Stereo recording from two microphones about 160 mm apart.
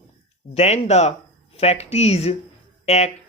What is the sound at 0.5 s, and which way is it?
Speech, 40° left (ahead or behind).